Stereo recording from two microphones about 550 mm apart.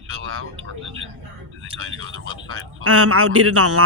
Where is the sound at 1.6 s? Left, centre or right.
Right.